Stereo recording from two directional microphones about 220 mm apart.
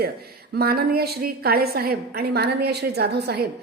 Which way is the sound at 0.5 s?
45° right (ahead or behind).